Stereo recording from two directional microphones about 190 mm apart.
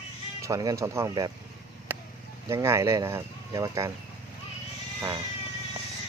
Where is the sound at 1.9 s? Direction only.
10° right (ahead or behind).